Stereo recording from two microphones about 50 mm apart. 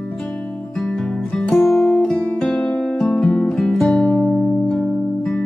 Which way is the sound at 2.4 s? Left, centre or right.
Left.